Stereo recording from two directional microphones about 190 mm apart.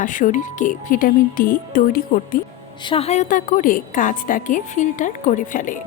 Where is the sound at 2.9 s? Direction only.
30° left (ahead or behind).